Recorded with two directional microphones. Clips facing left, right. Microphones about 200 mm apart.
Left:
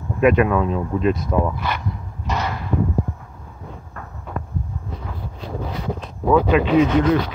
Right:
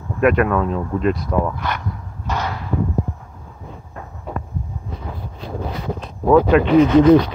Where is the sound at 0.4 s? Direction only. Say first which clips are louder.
Even; 10° left (ahead or behind).